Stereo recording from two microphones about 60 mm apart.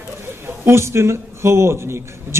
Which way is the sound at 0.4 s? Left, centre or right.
Right.